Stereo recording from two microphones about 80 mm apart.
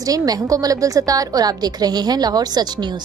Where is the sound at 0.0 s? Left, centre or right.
Right.